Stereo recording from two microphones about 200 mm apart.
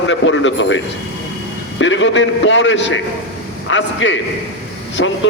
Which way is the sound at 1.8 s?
65° left (ahead or behind).